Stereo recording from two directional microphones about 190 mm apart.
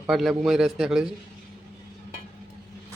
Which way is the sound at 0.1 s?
Centre (ahead or behind).